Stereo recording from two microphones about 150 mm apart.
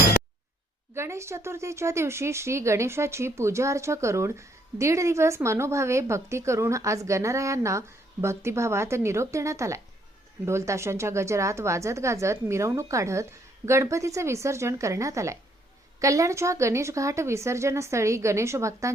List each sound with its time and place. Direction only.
0.9 s speech: 20° right (ahead or behind)